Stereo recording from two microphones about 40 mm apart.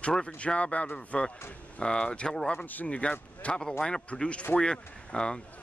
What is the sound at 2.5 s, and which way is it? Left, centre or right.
Speech, left.